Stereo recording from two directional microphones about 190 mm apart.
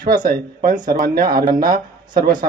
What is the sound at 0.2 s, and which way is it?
A man's voice, 50° right (ahead or behind).